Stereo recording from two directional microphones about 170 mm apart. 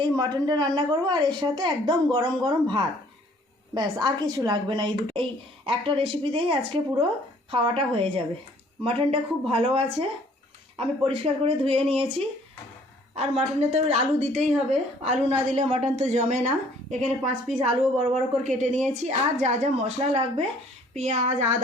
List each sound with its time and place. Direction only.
0.0 s a woman's voice: 25° right (ahead or behind)
13.1 s a woman's voice: 40° right (ahead or behind)